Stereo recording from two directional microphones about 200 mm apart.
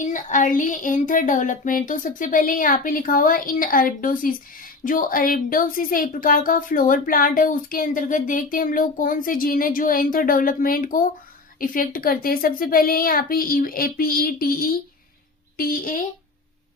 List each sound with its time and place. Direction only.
0.0 s speech: 40° left (ahead or behind)